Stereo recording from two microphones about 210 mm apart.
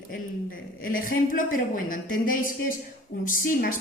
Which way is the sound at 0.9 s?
40° left (ahead or behind).